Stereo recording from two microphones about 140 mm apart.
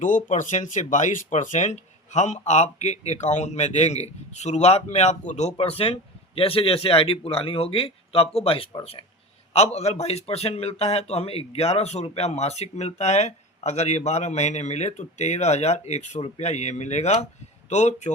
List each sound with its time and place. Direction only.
0.3 s speech: 60° left (ahead or behind)
5.5 s speech: 45° left (ahead or behind)